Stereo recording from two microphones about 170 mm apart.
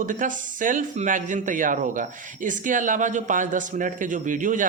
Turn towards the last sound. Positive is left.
turn(degrees=-50)  # may be behind; listen again after turning